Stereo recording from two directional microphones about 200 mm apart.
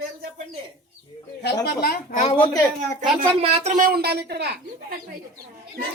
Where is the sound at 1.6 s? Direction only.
50° left (ahead or behind).